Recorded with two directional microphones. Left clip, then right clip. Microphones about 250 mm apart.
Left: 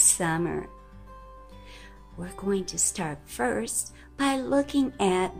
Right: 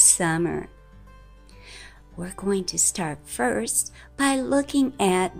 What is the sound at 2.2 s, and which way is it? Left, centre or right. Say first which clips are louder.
A woman's voice: right 3 dB; centre.